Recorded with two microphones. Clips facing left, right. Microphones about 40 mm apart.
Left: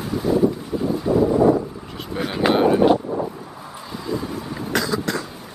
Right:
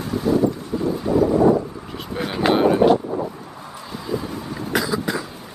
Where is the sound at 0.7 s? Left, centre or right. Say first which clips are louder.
Right 1 dB; centre.